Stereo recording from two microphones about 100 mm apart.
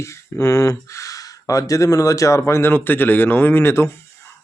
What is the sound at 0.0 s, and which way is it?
Speech, 30° left (ahead or behind).